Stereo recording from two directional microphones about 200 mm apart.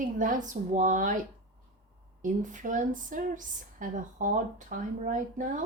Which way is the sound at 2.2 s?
40° right (ahead or behind).